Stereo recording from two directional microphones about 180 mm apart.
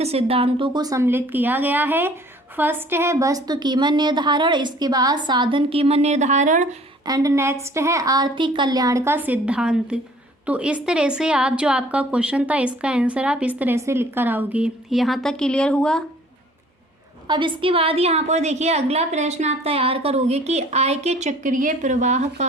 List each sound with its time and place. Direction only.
0.0 s a woman's voice: 35° right (ahead or behind)
7.0 s a woman's voice: 20° right (ahead or behind); by 16.0 s 5° left (ahead or behind)
17.2 s a woman's voice: 25° right (ahead or behind)